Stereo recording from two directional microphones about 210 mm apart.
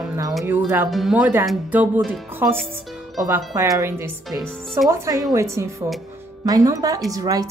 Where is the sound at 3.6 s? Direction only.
15° right (ahead or behind).